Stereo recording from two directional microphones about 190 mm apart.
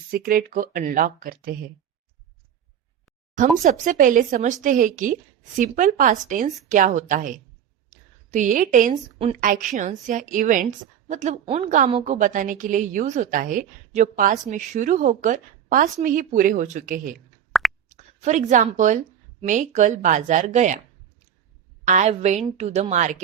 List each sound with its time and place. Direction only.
0.1 s a woman's voice: 50° right (ahead or behind)
3.3 s a woman's voice: 40° right (ahead or behind)
7.9 s a sound: 40° right (ahead or behind)
9.4 s a woman's voice: 45° right (ahead or behind)
21.8 s a woman's voice: 40° right (ahead or behind)